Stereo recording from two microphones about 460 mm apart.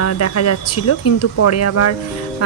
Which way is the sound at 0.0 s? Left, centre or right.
Left.